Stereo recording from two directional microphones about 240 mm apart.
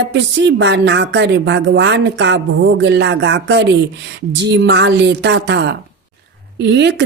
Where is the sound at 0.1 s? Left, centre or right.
Right.